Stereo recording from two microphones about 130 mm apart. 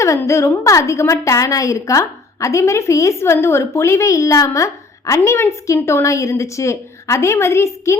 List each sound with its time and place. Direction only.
0.0 s a woman's voice: 20° left (ahead or behind)